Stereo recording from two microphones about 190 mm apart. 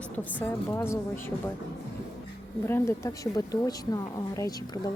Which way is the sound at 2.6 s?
15° left (ahead or behind).